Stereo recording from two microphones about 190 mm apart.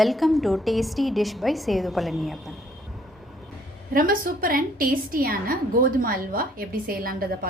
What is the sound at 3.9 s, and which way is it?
A woman's voice, 50° right (ahead or behind).